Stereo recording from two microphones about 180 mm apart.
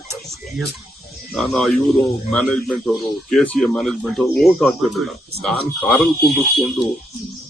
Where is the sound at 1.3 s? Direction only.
Centre (ahead or behind).